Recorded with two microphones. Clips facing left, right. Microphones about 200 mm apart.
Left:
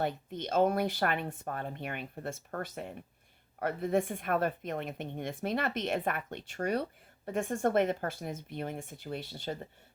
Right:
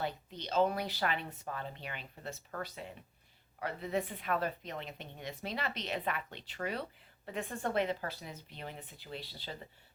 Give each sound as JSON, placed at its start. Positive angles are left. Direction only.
{"t": 0.0, "sound": "a woman's voice", "side_deg": 50}